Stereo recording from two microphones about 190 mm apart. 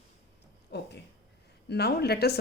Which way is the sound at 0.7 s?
65° left (ahead or behind).